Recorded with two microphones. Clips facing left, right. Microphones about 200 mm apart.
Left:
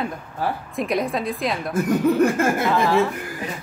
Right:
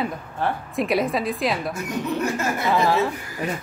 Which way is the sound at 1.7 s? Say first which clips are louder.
Left 8 dB; 50° left (ahead or behind).